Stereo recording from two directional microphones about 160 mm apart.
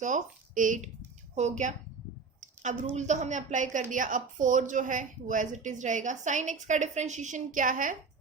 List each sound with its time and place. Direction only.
0.0 s a woman's voice: 50° right (ahead or behind)